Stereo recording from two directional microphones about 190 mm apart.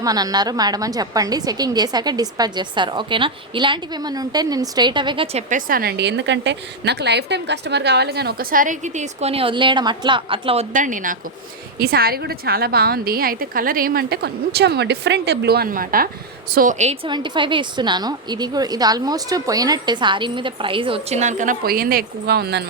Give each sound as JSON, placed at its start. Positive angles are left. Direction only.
{"t": 0.0, "sound": "a woman's voice", "side_deg": -20}
{"t": 5.5, "sound": "a woman's voice", "side_deg": -45}
{"t": 17.1, "sound": "a woman's voice", "side_deg": -25}